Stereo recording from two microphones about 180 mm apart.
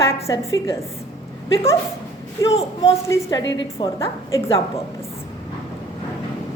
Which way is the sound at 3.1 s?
20° left (ahead or behind).